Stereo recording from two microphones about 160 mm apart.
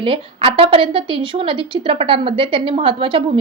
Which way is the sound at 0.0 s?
35° right (ahead or behind).